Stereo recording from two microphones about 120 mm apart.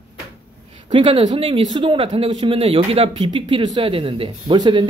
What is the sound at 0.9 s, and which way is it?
Speech, 45° right (ahead or behind).